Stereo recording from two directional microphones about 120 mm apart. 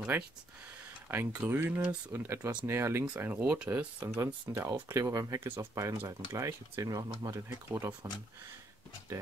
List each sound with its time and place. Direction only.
0.1 s speech: 15° right (ahead or behind)